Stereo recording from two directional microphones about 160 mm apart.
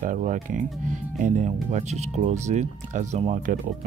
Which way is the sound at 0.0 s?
55° right (ahead or behind).